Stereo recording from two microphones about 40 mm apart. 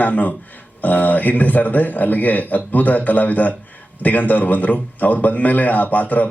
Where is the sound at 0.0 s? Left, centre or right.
Left.